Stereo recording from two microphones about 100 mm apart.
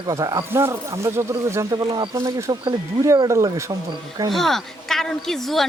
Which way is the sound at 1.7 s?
45° right (ahead or behind).